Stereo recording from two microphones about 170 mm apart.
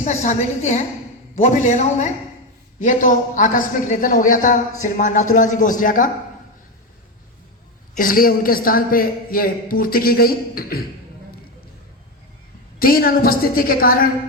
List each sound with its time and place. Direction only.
0.0 s a woman's voice: 45° left (ahead or behind)
7.9 s a man's voice: 55° left (ahead or behind)
12.8 s a man's voice: 60° left (ahead or behind)